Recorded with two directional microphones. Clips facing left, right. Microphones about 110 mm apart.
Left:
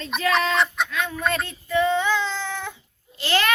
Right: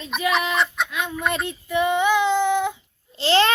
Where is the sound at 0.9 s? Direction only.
15° right (ahead or behind).